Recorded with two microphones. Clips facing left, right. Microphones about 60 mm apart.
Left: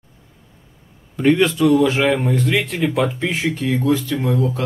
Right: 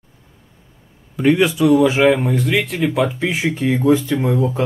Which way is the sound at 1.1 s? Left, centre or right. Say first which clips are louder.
Right 1 dB; centre.